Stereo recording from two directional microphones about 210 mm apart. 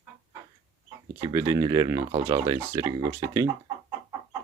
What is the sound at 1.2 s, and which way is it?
Speech, 15° right (ahead or behind).